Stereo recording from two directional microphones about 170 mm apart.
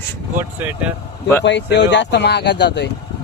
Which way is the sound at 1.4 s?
90° left.